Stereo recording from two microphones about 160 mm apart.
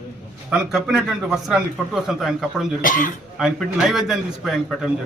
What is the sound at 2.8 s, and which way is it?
Speech, 55° left (ahead or behind).